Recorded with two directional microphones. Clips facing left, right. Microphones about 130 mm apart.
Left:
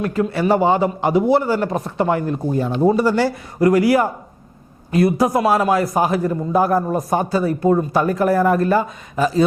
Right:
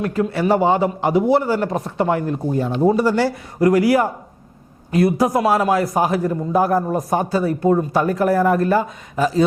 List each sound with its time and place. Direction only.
0.0 s a man's voice: 10° right (ahead or behind)